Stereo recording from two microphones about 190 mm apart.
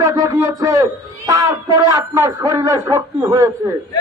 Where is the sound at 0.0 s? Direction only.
15° right (ahead or behind).